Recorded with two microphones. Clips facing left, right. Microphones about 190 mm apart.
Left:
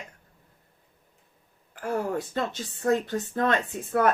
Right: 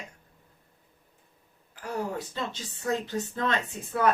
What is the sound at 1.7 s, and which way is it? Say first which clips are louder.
Speech: left 4 dB; 50° left (ahead or behind).